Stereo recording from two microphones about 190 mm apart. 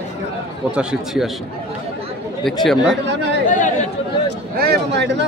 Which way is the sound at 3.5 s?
40° left (ahead or behind).